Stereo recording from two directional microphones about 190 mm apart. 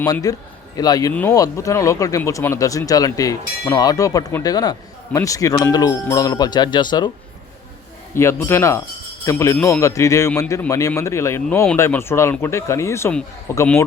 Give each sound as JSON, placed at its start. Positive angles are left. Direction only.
{"t": 0.0, "sound": "speech", "side_deg": 20}
{"t": 8.1, "sound": "speech", "side_deg": 15}